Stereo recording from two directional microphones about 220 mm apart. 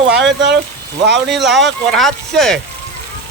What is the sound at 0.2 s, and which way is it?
Speech, 50° right (ahead or behind).